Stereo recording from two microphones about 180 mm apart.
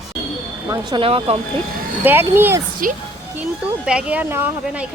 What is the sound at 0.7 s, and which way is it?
Speech, 25° right (ahead or behind).